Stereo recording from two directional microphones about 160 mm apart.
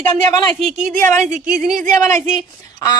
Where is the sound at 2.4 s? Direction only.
25° left (ahead or behind).